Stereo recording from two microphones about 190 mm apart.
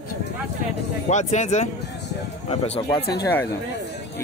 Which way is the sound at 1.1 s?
40° left (ahead or behind).